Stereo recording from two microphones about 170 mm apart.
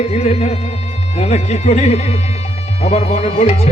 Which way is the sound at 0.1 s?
40° left (ahead or behind).